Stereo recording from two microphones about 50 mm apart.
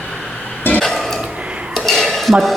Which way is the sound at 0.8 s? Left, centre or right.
Centre.